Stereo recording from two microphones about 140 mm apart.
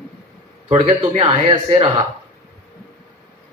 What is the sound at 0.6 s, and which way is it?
Speech, 50° right (ahead or behind).